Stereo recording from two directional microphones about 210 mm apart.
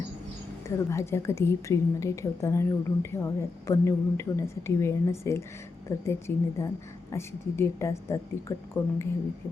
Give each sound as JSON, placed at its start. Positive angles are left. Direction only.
{"t": 0.7, "sound": "a woman's voice", "side_deg": 15}